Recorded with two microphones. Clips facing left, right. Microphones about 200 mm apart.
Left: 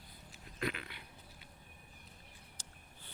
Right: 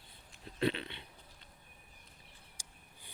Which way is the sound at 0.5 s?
30° right (ahead or behind).